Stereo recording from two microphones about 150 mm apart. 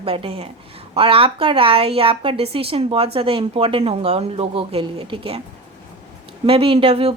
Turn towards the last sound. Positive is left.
turn(degrees=-40)  # may be behind; listen again after turning